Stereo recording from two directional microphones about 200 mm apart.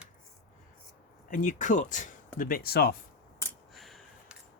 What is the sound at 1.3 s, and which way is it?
Speech, 40° left (ahead or behind).